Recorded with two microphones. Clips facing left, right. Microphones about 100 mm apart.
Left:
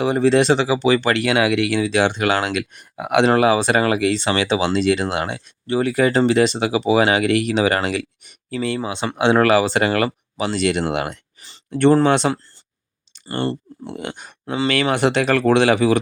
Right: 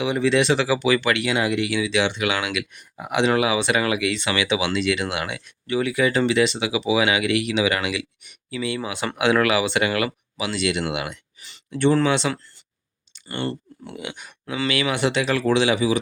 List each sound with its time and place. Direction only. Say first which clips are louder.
0.0 s speech: left 4 dB; 40° left (ahead or behind)
0.6 s speech: left 3 dB; 25° left (ahead or behind)
1.2 s speech: left 5 dB; 70° left (ahead or behind); by 2.8 s 40° left (ahead or behind)
2.9 s speech: left 6 dB; 65° left (ahead or behind)
3.2 s speech: left 4 dB; 40° left (ahead or behind)
8.8 s speech: left 2 dB; 25° left (ahead or behind); by 16.0 s 55° left (ahead or behind)